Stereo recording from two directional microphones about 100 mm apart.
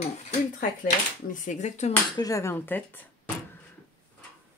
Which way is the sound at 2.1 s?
35° left (ahead or behind).